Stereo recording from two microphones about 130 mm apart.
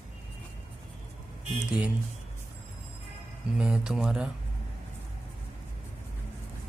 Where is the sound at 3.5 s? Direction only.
5° right (ahead or behind).